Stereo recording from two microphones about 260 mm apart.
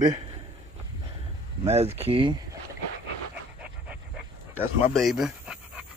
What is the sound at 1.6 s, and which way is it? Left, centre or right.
Speech, right.